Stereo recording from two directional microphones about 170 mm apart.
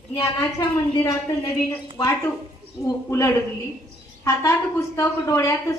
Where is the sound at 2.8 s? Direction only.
15° left (ahead or behind).